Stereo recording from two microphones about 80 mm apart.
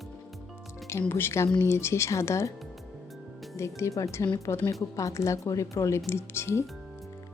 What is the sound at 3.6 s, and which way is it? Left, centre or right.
Speech, left.